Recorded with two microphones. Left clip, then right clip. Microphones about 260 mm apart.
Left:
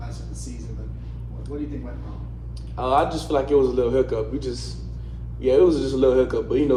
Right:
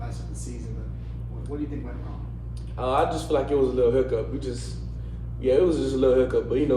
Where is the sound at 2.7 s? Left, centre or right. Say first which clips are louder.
Left 3 dB; left.